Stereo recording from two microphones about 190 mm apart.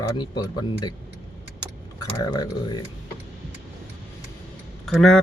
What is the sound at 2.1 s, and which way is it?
Speech, 20° left (ahead or behind).